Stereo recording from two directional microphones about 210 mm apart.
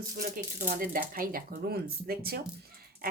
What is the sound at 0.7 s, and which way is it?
Speech, 40° right (ahead or behind).